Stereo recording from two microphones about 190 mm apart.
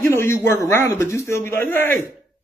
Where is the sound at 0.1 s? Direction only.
15° left (ahead or behind).